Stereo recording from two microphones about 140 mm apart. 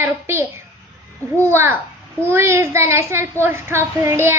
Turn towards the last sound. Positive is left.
turn(degrees=-20)  # may be behind; listen again after turning